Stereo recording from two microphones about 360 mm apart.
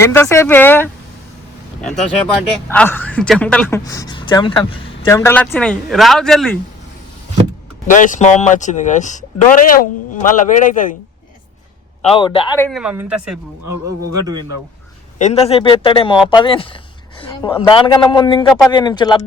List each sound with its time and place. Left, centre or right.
0.0 s a man's voice: centre
2.3 s speech: centre
7.9 s speech: left
12.0 s speech: centre
15.2 s a man's voice: centre